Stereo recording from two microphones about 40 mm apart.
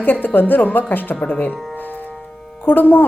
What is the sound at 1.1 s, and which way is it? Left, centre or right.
Speech, left.